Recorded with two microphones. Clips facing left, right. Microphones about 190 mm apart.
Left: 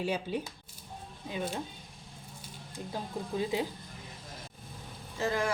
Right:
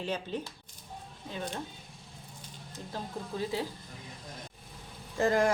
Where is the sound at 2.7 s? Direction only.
15° left (ahead or behind).